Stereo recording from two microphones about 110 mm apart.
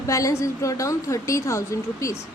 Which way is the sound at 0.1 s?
30° left (ahead or behind).